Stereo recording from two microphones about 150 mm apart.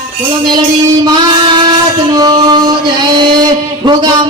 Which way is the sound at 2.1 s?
25° right (ahead or behind).